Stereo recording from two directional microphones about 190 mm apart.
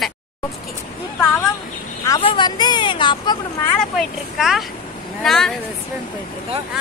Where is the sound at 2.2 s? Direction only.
25° left (ahead or behind).